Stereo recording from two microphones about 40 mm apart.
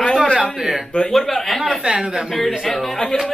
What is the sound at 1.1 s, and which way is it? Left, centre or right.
Speech, centre.